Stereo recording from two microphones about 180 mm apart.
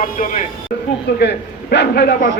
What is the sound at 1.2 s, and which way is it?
A man's voice, 65° left (ahead or behind).